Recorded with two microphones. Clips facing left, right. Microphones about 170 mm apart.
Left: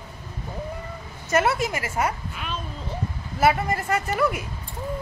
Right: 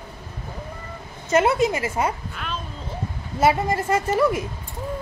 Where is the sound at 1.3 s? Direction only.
20° right (ahead or behind).